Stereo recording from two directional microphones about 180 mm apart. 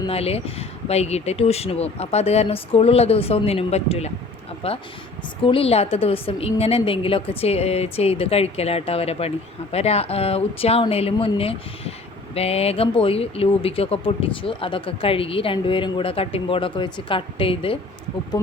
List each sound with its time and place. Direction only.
0.1 s speech: 35° left (ahead or behind)